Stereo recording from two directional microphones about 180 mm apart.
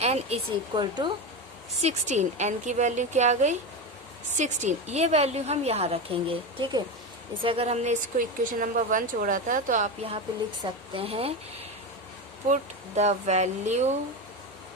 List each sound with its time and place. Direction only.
0.0 s speech: 35° right (ahead or behind)
1.8 s a woman's voice: 40° right (ahead or behind)
10.9 s a woman's voice: 30° right (ahead or behind)
13.0 s a woman's voice: 40° right (ahead or behind)